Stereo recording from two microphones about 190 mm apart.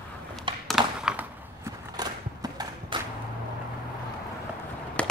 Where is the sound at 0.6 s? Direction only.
5° right (ahead or behind).